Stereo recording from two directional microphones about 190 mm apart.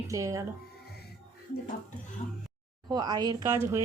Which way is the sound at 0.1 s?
15° right (ahead or behind).